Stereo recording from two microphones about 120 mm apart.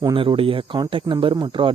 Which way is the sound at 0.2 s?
50° right (ahead or behind).